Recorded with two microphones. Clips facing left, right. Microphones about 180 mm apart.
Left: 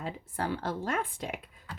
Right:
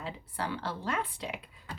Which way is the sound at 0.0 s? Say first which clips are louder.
Left 2 dB; 45° left (ahead or behind).